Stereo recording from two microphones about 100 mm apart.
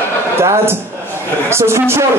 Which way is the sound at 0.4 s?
25° right (ahead or behind).